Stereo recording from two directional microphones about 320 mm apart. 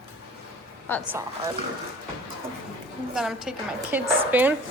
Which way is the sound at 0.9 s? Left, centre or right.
Centre.